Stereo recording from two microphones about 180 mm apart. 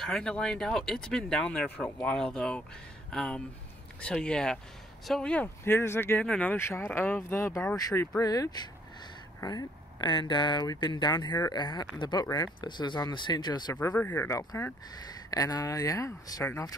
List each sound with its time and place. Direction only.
0.0 s speech: 5° left (ahead or behind); by 13.7 s 25° left (ahead or behind)
13.7 s speech: 10° left (ahead or behind)